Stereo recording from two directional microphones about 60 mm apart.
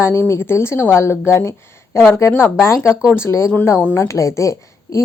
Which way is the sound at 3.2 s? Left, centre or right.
Left.